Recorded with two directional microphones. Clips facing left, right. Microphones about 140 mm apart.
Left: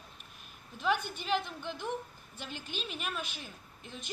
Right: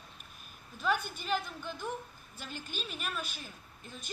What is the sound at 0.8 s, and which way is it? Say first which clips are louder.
A woman's voice: left 1 dB; 25° left (ahead or behind).